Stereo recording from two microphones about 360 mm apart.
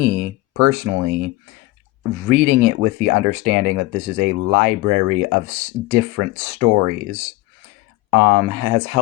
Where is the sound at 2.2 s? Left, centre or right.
Right.